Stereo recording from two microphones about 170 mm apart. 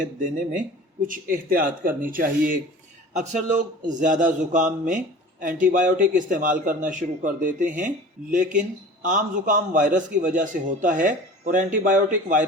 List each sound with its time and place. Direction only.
0.0 s a man's voice: 50° right (ahead or behind)
3.1 s a man's voice: 45° right (ahead or behind)